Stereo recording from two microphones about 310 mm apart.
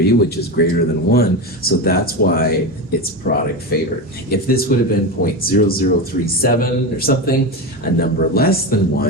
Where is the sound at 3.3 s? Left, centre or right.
Left.